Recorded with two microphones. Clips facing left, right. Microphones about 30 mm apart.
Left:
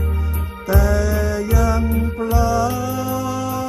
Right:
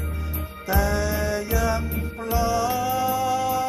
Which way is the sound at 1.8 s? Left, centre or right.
Centre.